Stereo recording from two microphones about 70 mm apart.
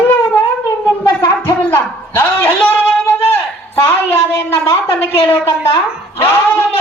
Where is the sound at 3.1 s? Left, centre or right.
Left.